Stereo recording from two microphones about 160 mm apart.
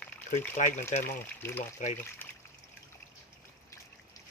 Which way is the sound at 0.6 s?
50° left (ahead or behind).